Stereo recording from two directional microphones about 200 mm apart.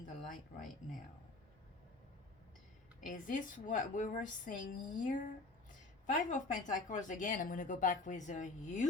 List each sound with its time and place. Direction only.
0.0 s speech: 40° left (ahead or behind)
3.1 s speech: 40° left (ahead or behind)